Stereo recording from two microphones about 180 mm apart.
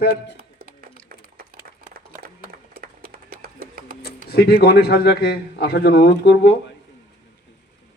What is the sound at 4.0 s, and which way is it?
Speech, 60° left (ahead or behind).